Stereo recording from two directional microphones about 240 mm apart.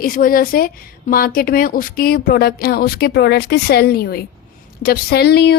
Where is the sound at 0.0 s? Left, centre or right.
Left.